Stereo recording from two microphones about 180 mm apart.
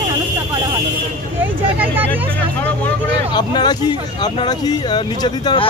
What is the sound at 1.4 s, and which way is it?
Speech, 10° right (ahead or behind).